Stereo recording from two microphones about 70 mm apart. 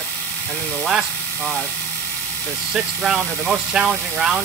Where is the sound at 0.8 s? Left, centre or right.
Centre.